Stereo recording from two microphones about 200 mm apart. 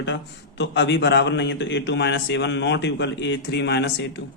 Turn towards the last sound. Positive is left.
turn(degrees=60)  # may be behind; listen again after turning